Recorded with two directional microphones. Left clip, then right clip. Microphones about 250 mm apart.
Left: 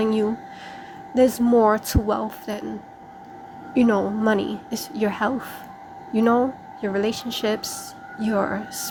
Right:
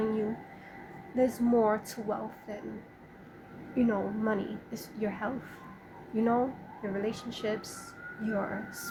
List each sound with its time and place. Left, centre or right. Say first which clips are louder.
0.0 s a sound: left 10 dB; left
1.1 s a woman's voice: left 10 dB; left
3.8 s a woman's voice: left 10 dB; left